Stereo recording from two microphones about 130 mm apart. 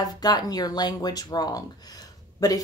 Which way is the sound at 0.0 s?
30° left (ahead or behind).